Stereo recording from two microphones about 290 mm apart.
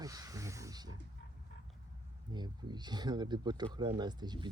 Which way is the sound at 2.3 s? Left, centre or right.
Centre.